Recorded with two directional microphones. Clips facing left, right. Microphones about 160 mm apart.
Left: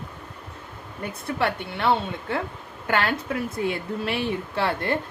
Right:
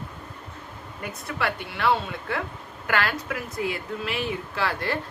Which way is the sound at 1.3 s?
25° left (ahead or behind).